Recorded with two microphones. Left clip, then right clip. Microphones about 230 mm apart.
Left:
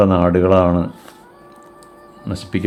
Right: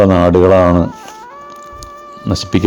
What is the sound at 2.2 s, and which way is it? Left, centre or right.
Speech, right.